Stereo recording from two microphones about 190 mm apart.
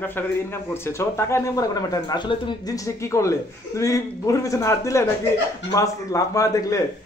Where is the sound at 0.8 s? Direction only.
15° left (ahead or behind).